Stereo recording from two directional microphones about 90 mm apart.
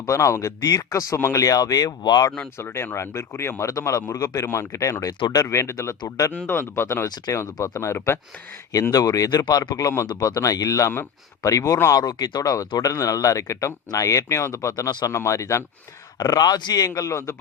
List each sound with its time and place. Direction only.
0.0 s a man's voice: 35° left (ahead or behind)
2.6 s a man's voice: 25° left (ahead or behind)
5.2 s speech: 50° left (ahead or behind)
5.5 s a man's voice: 30° left (ahead or behind)
8.7 s a man's voice: 45° left (ahead or behind)
16.1 s speech: 45° left (ahead or behind); by 17.4 s 30° left (ahead or behind)